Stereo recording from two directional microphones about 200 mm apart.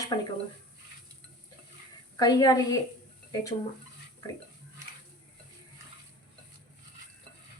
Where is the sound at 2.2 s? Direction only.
20° left (ahead or behind).